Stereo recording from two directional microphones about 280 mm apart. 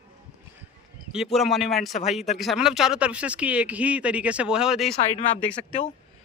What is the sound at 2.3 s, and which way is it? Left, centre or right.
Speech, centre.